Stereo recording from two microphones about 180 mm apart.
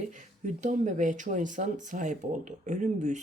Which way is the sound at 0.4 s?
40° right (ahead or behind).